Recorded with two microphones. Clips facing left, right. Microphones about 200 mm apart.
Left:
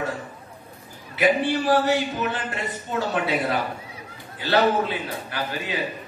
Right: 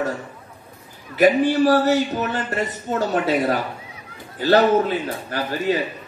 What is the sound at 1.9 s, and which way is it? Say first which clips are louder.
A man's voice: right 4 dB; 40° right (ahead or behind).